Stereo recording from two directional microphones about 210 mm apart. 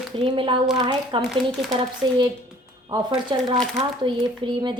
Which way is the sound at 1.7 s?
20° right (ahead or behind).